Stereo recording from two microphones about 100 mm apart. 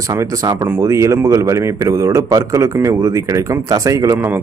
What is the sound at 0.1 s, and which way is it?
A man's voice, 30° right (ahead or behind).